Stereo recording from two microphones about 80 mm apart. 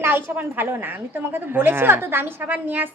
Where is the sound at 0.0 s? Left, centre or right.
Right.